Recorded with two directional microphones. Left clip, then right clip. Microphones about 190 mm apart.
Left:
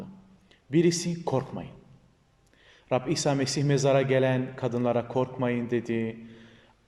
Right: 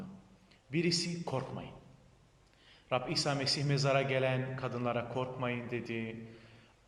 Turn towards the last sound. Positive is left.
turn(degrees=30)  # may be behind; listen again after turning